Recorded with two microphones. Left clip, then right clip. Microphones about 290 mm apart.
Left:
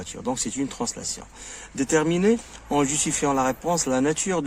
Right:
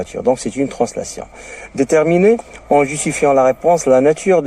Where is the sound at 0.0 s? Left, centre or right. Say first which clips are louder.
Right 13 dB; left.